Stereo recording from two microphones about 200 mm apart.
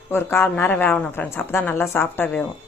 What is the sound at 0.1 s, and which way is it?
Speech, 10° left (ahead or behind).